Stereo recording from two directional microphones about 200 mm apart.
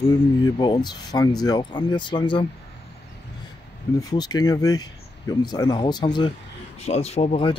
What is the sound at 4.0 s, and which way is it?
Speech, 20° left (ahead or behind).